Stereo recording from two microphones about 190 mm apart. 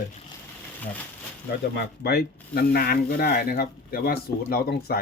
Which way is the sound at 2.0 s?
55° left (ahead or behind).